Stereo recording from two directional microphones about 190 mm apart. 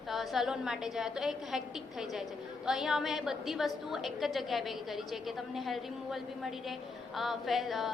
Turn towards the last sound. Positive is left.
turn(degrees=0)  # may be behind; listen again after turning